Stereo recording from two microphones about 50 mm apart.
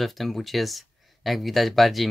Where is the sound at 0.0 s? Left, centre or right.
Centre.